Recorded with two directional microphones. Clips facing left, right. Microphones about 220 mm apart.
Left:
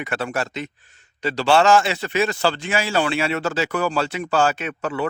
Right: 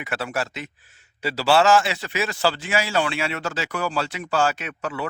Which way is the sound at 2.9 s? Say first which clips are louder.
Left 3 dB; 35° left (ahead or behind).